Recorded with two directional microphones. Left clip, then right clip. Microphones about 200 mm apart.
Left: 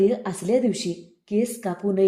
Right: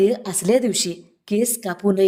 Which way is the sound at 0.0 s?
30° right (ahead or behind).